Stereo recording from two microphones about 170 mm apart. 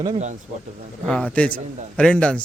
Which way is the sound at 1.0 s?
5° left (ahead or behind).